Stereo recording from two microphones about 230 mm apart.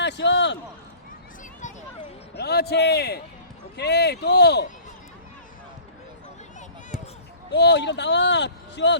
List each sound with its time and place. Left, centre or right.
0.0 s a sound: left
2.3 s speech: left
7.5 s speech: left